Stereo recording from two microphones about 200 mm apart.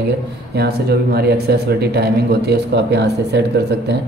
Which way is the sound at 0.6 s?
55° right (ahead or behind).